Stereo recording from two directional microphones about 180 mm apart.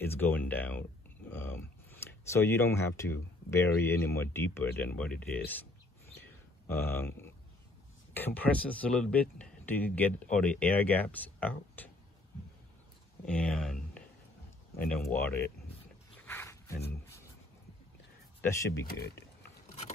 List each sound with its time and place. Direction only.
0.0 s speech: 10° left (ahead or behind)
6.1 s a sound: 10° left (ahead or behind)
8.1 s speech: 10° left (ahead or behind)
13.2 s speech: 5° left (ahead or behind)
16.2 s roaring cats: 10° left (ahead or behind)
18.4 s speech: 15° left (ahead or behind)
18.9 s speech: 60° left (ahead or behind)